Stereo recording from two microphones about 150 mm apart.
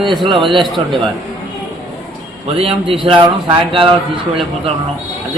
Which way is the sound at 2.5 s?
40° right (ahead or behind).